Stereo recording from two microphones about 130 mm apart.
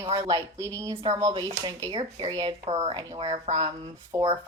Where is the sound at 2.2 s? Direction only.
35° right (ahead or behind).